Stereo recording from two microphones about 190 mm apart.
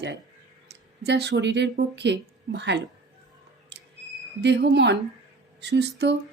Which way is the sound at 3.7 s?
65° right (ahead or behind).